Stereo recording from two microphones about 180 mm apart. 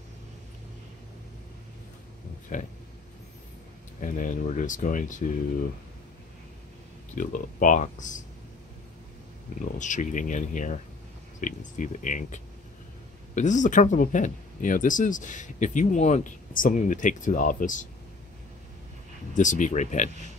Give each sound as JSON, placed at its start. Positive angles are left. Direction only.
{"t": 2.5, "sound": "speech", "side_deg": 45}
{"t": 4.0, "sound": "speech", "side_deg": 45}
{"t": 7.2, "sound": "speech", "side_deg": 45}
{"t": 9.8, "sound": "speech", "side_deg": 45}
{"t": 19.3, "sound": "speech", "side_deg": 45}